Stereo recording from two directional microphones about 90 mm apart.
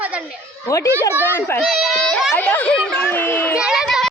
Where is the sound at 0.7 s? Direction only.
35° left (ahead or behind).